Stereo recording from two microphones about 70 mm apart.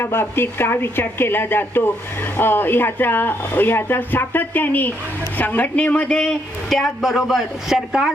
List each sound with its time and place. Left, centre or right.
0.0 s speech: left
6.1 s a man's voice: centre